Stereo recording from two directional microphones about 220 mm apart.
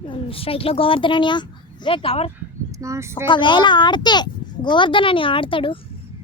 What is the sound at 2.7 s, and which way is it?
Speech, 15° right (ahead or behind).